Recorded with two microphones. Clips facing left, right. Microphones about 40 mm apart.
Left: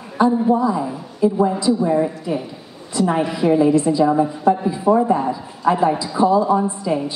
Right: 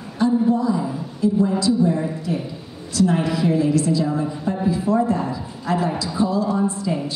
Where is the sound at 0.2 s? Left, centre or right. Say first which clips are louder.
Left 3 dB; left.